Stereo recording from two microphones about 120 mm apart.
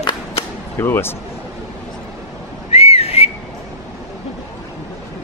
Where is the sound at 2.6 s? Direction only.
60° left (ahead or behind).